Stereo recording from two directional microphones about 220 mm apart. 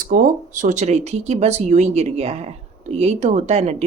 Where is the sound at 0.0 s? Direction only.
35° right (ahead or behind).